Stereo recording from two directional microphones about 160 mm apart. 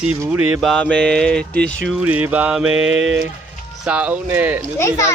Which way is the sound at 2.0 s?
10° right (ahead or behind).